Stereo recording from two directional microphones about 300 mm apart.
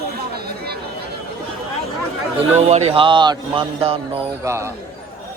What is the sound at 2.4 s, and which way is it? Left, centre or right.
Speech, right.